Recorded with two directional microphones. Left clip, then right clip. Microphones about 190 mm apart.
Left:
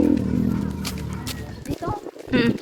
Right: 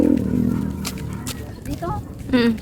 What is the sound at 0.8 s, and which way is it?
Music, 10° right (ahead or behind).